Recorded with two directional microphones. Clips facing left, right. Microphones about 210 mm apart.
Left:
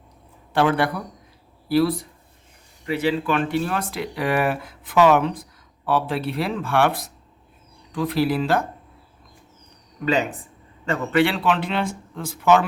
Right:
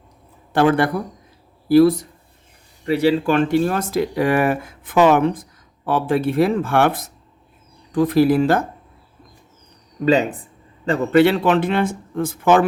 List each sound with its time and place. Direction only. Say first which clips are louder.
0.5 s speech: right 4 dB; 45° right (ahead or behind)
10.1 s speech: right 5 dB; 35° right (ahead or behind); by 12.6 s 50° right (ahead or behind)